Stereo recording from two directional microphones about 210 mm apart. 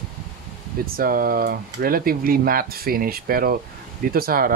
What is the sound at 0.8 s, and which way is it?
Speech, 45° right (ahead or behind).